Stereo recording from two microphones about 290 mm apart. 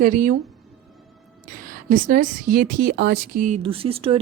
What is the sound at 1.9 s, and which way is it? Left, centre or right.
Speech, right.